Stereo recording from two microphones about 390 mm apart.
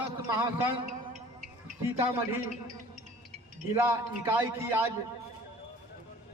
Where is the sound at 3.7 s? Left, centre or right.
Centre.